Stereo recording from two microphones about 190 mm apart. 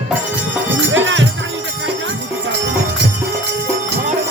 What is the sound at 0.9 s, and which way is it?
Music, 80° right.